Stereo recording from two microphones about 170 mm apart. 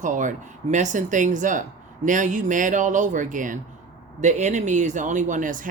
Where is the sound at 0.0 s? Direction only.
50° right (ahead or behind).